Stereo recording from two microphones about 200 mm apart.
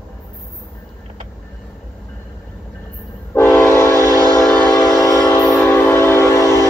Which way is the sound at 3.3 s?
10° left (ahead or behind).